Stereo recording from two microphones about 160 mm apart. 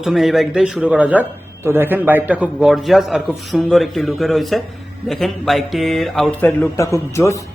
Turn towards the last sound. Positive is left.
turn(degrees=15)  # may be behind; listen again after turning